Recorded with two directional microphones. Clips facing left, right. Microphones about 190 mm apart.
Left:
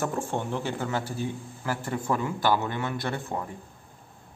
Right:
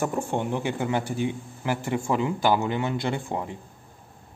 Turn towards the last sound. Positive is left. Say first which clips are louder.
# right 3 dB
turn(degrees=-15)  # may be behind; listen again after turning